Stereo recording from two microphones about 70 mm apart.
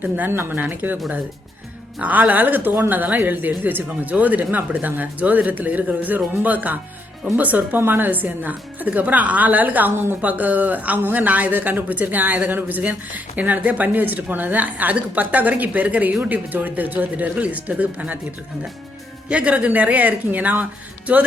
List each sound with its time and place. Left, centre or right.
0.0 s speech: right
2.0 s speech: right
19.3 s speech: centre